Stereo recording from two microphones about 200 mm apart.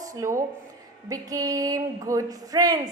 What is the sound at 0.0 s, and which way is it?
Speech, 15° right (ahead or behind).